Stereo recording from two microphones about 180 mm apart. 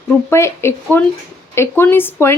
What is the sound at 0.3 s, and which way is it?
A woman's voice, 15° left (ahead or behind).